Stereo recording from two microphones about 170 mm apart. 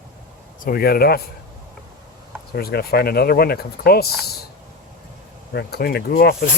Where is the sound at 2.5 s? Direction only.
65° left (ahead or behind).